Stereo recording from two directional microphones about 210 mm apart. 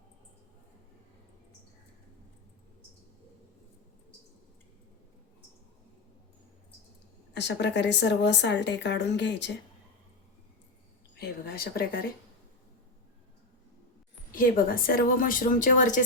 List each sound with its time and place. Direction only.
7.3 s speech: 55° left (ahead or behind)
11.2 s speech: 45° left (ahead or behind)
14.3 s a woman's voice: 45° left (ahead or behind)